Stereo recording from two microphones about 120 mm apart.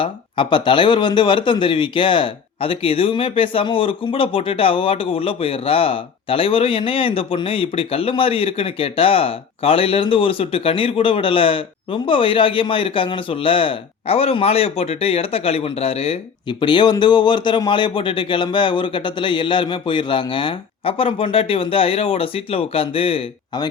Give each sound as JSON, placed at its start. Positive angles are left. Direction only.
{"t": 0.0, "sound": "speech", "side_deg": 45}
{"t": 16.5, "sound": "speech", "side_deg": 40}